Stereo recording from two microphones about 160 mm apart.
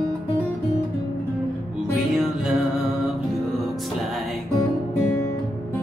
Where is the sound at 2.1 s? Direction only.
5° right (ahead or behind).